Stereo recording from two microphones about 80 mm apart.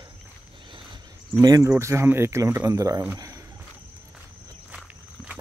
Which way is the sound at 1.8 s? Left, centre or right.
Right.